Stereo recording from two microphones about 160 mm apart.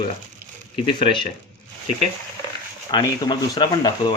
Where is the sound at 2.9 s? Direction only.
30° left (ahead or behind).